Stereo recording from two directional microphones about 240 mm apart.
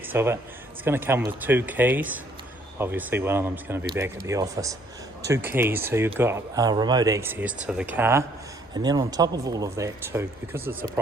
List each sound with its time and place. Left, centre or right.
0.1 s speech: centre